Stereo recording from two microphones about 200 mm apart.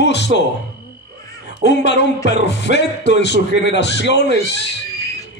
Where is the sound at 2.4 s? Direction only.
60° left (ahead or behind).